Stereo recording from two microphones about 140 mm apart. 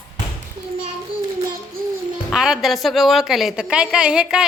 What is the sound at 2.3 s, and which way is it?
Speech, 5° right (ahead or behind).